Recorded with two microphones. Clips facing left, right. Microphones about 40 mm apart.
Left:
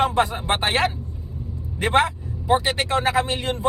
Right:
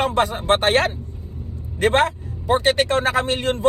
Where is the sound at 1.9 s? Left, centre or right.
Right.